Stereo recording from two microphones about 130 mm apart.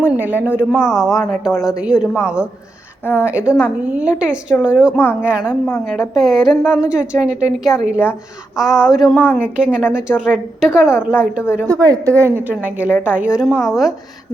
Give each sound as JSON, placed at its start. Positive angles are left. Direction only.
{"t": 0.0, "sound": "a woman's voice", "side_deg": -15}
{"t": 3.0, "sound": "a woman's voice", "side_deg": 15}
{"t": 3.2, "sound": "a woman's voice", "side_deg": -10}
{"t": 5.8, "sound": "a woman's voice", "side_deg": 0}
{"t": 9.1, "sound": "a woman's voice", "side_deg": 10}
{"t": 9.4, "sound": "a woman's voice", "side_deg": -10}
{"t": 11.7, "sound": "a woman's voice", "side_deg": -25}